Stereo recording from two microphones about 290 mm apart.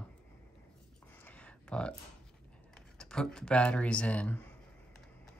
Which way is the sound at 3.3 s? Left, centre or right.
Centre.